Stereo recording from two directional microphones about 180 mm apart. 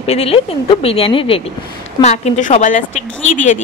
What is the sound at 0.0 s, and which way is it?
A woman's voice, 35° left (ahead or behind).